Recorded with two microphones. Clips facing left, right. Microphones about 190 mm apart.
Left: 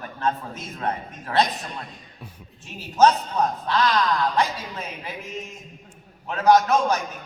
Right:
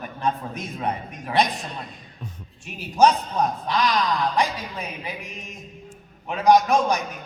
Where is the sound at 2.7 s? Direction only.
15° right (ahead or behind).